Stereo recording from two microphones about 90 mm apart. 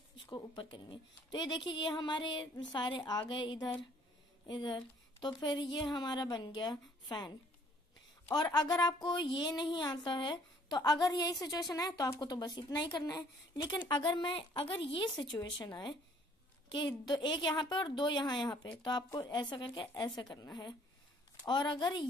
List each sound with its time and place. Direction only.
0.3 s a woman's voice: 60° left (ahead or behind); by 13.7 s 45° left (ahead or behind)
13.8 s a woman's voice: 55° left (ahead or behind); by 15.0 s 75° left (ahead or behind)
15.1 s speech: 60° left (ahead or behind)
21.5 s speech: 60° left (ahead or behind)